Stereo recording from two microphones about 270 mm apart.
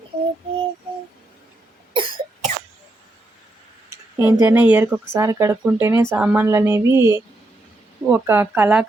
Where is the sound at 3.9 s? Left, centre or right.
Centre.